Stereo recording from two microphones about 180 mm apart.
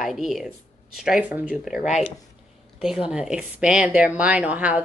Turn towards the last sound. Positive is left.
turn(degrees=-10)  # may be behind; listen again after turning